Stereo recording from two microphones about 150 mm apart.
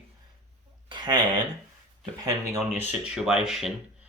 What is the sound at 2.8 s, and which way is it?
Speech, 10° right (ahead or behind).